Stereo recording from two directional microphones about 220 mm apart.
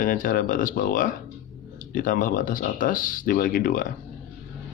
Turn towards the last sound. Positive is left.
turn(degrees=40)  # may be behind; listen again after turning